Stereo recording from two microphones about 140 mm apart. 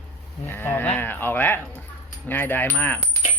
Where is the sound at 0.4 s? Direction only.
15° left (ahead or behind).